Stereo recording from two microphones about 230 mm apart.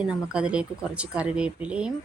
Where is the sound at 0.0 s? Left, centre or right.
Centre.